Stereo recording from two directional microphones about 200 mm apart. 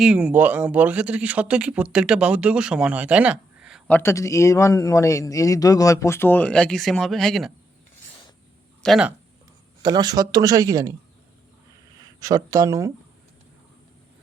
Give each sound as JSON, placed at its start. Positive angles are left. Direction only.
{"t": 0.0, "sound": "speech", "side_deg": -5}
{"t": 3.9, "sound": "a man's voice", "side_deg": 15}
{"t": 8.8, "sound": "speech", "side_deg": 0}
{"t": 9.8, "sound": "speech", "side_deg": -20}
{"t": 11.9, "sound": "speech", "side_deg": -15}